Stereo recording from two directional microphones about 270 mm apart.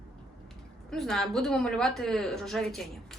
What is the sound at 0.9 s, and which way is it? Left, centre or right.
A woman's voice, centre.